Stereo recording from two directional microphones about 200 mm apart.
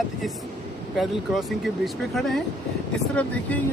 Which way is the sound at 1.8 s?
Centre (ahead or behind).